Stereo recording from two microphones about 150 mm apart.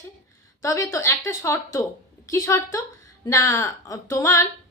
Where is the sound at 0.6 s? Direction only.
20° left (ahead or behind).